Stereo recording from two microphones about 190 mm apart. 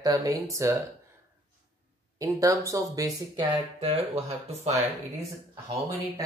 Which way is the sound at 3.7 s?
35° right (ahead or behind).